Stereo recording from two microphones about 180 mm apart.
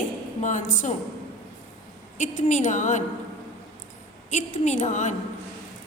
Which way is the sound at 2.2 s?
45° left (ahead or behind).